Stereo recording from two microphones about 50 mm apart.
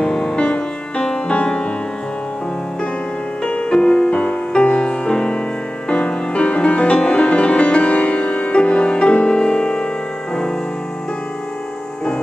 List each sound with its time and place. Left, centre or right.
0.0 s music: centre
3.4 s music: left